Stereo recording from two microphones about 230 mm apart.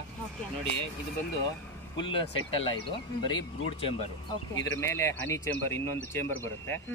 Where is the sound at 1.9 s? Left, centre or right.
Left.